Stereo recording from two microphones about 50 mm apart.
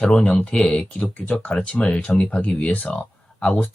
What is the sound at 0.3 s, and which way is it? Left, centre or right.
Speech, centre.